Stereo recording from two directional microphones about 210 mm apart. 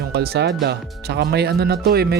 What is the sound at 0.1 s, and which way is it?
Speech, 50° right (ahead or behind).